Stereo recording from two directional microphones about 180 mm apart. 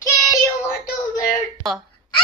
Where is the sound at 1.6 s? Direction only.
Centre (ahead or behind).